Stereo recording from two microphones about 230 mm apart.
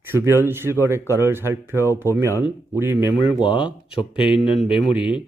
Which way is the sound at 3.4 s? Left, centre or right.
Left.